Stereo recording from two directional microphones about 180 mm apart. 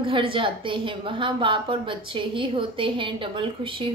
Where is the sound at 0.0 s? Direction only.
30° right (ahead or behind).